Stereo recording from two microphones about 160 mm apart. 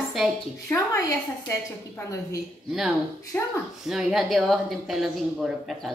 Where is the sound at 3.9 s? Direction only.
Centre (ahead or behind).